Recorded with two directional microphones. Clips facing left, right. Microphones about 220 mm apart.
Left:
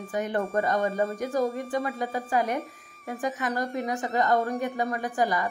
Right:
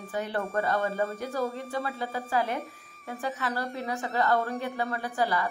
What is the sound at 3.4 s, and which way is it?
A woman's voice, 15° left (ahead or behind).